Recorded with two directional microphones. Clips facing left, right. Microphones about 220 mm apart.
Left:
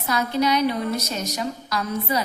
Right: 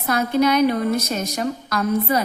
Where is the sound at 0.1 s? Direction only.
50° right (ahead or behind).